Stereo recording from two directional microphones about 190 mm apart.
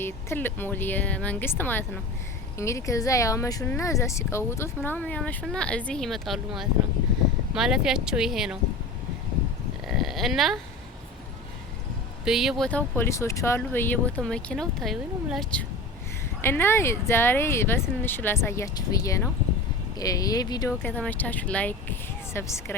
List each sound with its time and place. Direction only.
0.0 s speech: 10° left (ahead or behind)
9.8 s a sound: centre (ahead or behind)
12.2 s speech: centre (ahead or behind)
16.4 s speech: 10° left (ahead or behind)
20.8 s speech: 10° left (ahead or behind)